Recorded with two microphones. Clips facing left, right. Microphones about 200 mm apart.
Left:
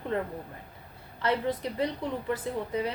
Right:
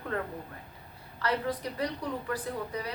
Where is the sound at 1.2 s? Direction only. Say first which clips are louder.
Left 3 dB; 25° left (ahead or behind).